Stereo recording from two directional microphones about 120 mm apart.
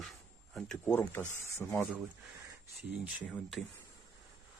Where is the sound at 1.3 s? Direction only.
20° left (ahead or behind).